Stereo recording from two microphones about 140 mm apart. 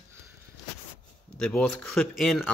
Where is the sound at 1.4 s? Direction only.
5° left (ahead or behind).